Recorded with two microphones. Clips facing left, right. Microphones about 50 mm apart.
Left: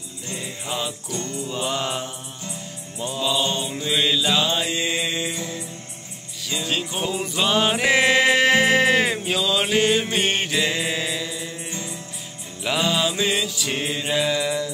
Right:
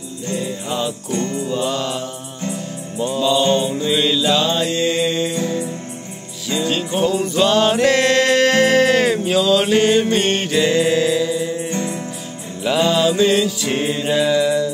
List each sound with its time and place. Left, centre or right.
0.4 s music: centre
1.1 s music: right
1.5 s music: centre
1.8 s mantra: left
3.0 s music: centre
6.5 s music: centre
11.7 s music: right
12.6 s mantra: centre